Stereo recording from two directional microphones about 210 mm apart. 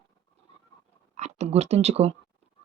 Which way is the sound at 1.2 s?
30° right (ahead or behind).